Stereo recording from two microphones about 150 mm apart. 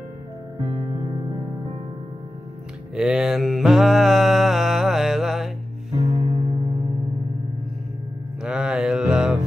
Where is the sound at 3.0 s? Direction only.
5° right (ahead or behind).